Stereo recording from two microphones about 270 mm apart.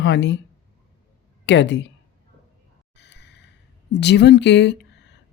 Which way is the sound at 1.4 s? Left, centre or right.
Left.